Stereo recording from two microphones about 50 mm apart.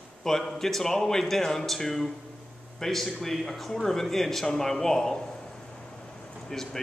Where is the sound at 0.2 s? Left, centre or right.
Centre.